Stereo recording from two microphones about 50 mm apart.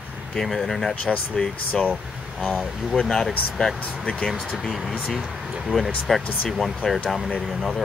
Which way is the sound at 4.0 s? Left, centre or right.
Centre.